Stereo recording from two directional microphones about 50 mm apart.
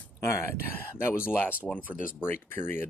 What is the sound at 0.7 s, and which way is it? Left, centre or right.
Speech, left.